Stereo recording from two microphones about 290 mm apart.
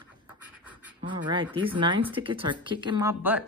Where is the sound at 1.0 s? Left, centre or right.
Centre.